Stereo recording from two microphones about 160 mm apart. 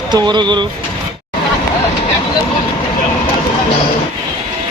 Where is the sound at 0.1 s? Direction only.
25° right (ahead or behind).